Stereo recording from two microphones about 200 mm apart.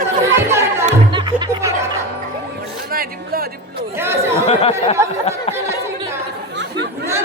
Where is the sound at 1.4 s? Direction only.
15° right (ahead or behind).